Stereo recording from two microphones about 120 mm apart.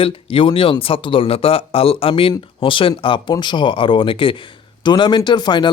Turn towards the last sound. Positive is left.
turn(degrees=40)  # may be behind; listen again after turning